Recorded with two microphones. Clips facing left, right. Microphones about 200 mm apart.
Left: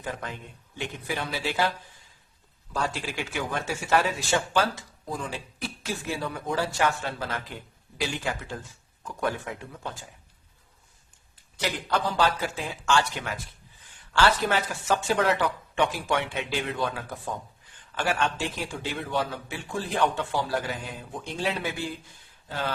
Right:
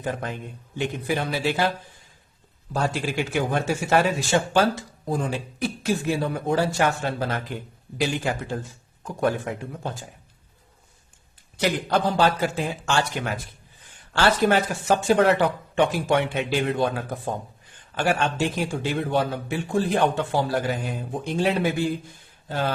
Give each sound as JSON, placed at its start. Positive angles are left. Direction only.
{"t": 0.0, "sound": "a man's voice", "side_deg": -50}
{"t": 2.7, "sound": "a man's voice", "side_deg": -45}
{"t": 4.5, "sound": "speech", "side_deg": -35}
{"t": 5.1, "sound": "a man's voice", "side_deg": -50}
{"t": 12.1, "sound": "a man's voice", "side_deg": -50}
{"t": 20.1, "sound": "a man's voice", "side_deg": -50}